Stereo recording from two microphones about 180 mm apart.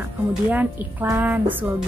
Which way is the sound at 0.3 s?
10° right (ahead or behind).